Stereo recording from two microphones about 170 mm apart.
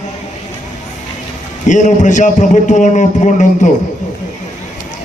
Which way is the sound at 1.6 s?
45° left (ahead or behind).